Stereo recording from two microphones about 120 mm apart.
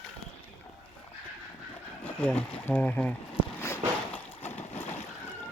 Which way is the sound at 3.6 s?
20° left (ahead or behind).